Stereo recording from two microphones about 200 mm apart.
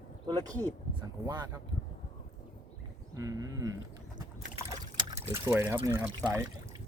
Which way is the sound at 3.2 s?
15° right (ahead or behind).